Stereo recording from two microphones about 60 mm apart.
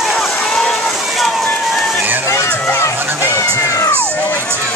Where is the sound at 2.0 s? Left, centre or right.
Right.